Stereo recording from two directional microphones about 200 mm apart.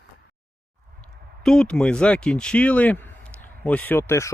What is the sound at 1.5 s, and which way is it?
Speech, 5° left (ahead or behind).